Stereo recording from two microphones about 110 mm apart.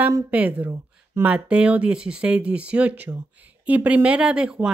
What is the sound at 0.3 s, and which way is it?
Speech, 15° right (ahead or behind).